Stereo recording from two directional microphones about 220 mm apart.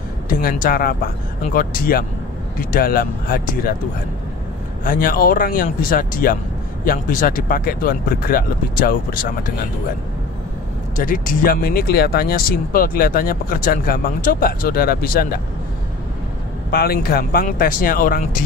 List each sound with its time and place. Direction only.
0.3 s speech: 40° left (ahead or behind)
4.8 s speech: 40° left (ahead or behind)
11.0 s speech: 40° left (ahead or behind)
16.7 s speech: 45° left (ahead or behind)